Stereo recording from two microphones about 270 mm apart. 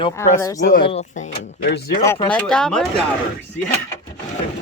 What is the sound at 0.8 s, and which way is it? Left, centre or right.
Speech, left.